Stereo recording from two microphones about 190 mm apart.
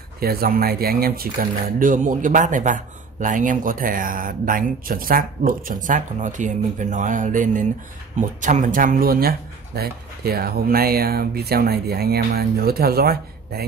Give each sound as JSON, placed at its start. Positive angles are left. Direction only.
{"t": 0.2, "sound": "speech", "side_deg": -55}